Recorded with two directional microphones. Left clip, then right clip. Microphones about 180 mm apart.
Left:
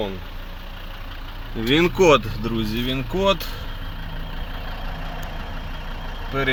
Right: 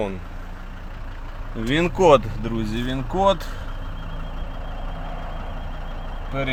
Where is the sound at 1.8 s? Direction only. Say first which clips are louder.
Right 1 dB; 5° left (ahead or behind).